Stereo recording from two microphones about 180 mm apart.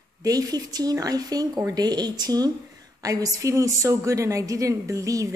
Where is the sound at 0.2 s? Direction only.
20° right (ahead or behind).